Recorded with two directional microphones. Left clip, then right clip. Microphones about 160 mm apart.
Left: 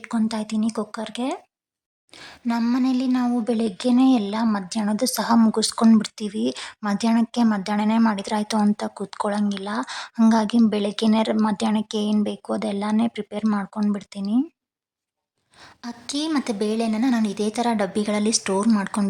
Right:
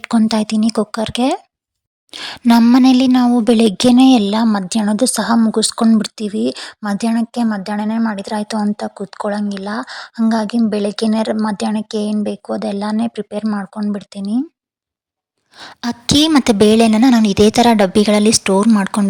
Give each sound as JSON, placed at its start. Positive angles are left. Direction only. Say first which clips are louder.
{"t": 0.0, "sound": "a woman's voice", "louder": "right 10 dB", "side_deg": -45}
{"t": 2.1, "sound": "speech", "louder": "right 13 dB", "side_deg": -55}
{"t": 3.2, "sound": "a woman's voice", "louder": "right 11 dB", "side_deg": -40}
{"t": 13.4, "sound": "a woman's voice", "louder": "right 3 dB", "side_deg": -10}
{"t": 13.9, "sound": "speech", "louder": "right 5 dB", "side_deg": -20}
{"t": 15.5, "sound": "a woman's voice", "louder": "right 13 dB", "side_deg": -55}